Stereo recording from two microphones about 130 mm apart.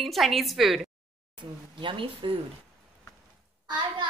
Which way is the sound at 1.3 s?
40° right (ahead or behind).